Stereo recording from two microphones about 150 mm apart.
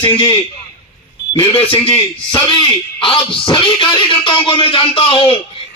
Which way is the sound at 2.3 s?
35° left (ahead or behind).